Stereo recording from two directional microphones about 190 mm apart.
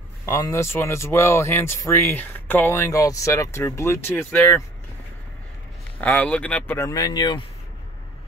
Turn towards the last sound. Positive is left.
turn(degrees=25)  # may be behind; listen again after turning